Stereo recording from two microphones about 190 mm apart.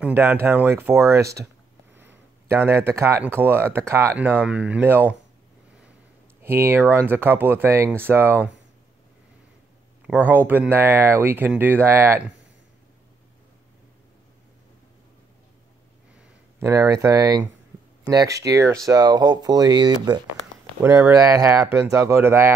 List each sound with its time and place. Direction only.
0.0 s speech: 10° right (ahead or behind)
6.4 s speech: 10° right (ahead or behind)
10.0 s speech: 10° right (ahead or behind)
16.5 s speech: 15° right (ahead or behind)